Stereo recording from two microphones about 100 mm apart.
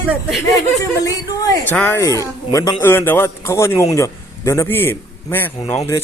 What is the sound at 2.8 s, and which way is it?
A man's voice, 20° left (ahead or behind).